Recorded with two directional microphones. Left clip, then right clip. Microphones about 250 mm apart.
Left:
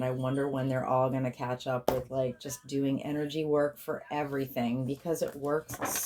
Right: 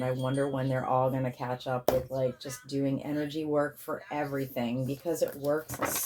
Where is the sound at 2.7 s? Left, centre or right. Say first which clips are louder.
Even; left.